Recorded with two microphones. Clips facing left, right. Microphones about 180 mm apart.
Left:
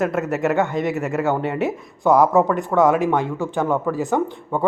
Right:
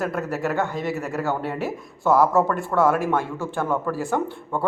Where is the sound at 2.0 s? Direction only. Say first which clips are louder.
Left 3 dB; 15° left (ahead or behind).